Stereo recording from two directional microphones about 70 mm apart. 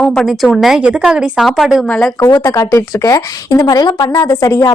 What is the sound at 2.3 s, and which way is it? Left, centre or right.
Speech, left.